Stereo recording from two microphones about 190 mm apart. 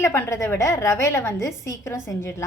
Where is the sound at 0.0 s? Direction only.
15° left (ahead or behind).